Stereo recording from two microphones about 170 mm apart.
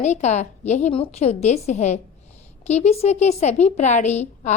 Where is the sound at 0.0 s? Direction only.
40° left (ahead or behind).